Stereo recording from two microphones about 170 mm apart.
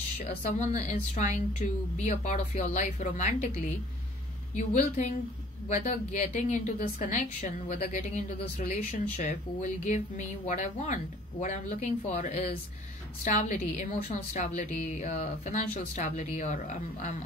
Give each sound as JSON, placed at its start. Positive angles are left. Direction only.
{"t": 0.2, "sound": "a woman's voice", "side_deg": 45}
{"t": 4.6, "sound": "a woman's voice", "side_deg": 45}